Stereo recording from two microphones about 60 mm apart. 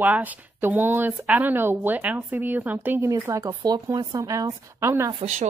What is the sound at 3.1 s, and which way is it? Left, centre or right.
Speech, right.